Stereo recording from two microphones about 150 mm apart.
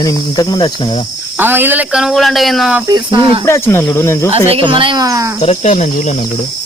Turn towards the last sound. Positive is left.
turn(degrees=55)  # may be behind; listen again after turning